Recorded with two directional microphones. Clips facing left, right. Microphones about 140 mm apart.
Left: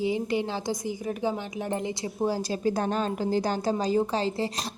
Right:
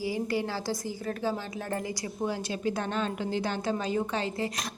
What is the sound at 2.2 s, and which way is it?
A woman's voice, 35° left (ahead or behind).